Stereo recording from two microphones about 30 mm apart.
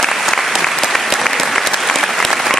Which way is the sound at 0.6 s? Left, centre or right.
Centre.